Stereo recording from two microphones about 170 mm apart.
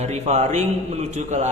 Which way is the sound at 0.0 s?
40° right (ahead or behind).